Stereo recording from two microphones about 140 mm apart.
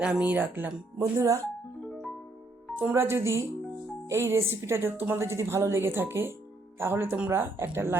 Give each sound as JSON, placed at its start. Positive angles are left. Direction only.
{"t": 0.0, "sound": "a woman's voice", "side_deg": -10}
{"t": 1.9, "sound": "music", "side_deg": 0}
{"t": 2.7, "sound": "a woman's voice", "side_deg": -15}